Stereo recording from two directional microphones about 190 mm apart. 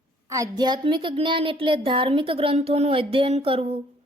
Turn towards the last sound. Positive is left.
turn(degrees=-30)  # may be behind; listen again after turning